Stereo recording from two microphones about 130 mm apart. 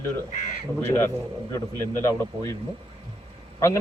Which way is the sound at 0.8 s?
15° left (ahead or behind).